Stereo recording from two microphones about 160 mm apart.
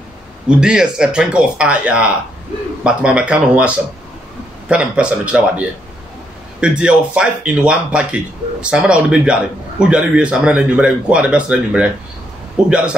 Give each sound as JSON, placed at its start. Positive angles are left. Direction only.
{"t": 0.6, "sound": "speech", "side_deg": -5}